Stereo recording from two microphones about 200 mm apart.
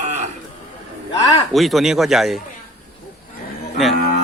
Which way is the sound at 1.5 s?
Centre (ahead or behind).